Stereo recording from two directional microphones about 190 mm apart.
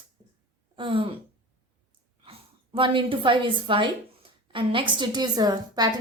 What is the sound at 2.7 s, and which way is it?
Speech, 25° right (ahead or behind).